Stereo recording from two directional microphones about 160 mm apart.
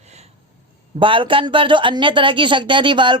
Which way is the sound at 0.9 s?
30° right (ahead or behind).